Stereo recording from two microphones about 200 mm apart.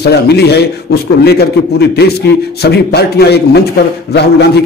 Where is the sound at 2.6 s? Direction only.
55° left (ahead or behind).